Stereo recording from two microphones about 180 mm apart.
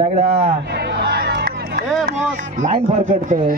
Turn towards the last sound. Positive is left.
turn(degrees=-45)  # may be behind; listen again after turning